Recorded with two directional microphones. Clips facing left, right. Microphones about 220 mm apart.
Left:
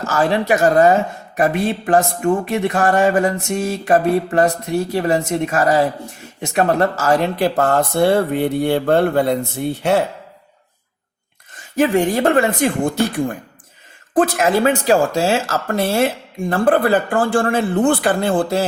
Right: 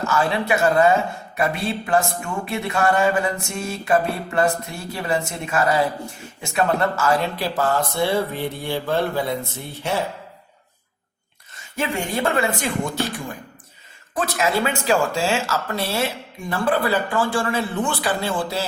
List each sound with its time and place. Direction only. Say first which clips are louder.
0.1 s a woman's voice: left 6 dB; 40° left (ahead or behind); by 10.0 s 65° left (ahead or behind)
12.2 s speech: left 7 dB; 45° left (ahead or behind)
14.6 s speech: left 6 dB; 35° left (ahead or behind); by 18.6 s 55° left (ahead or behind)